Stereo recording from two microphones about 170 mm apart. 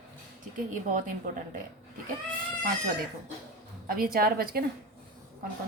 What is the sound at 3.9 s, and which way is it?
Speech, 60° right (ahead or behind).